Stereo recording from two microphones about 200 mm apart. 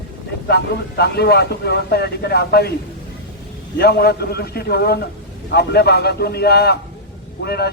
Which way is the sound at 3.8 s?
50° left (ahead or behind).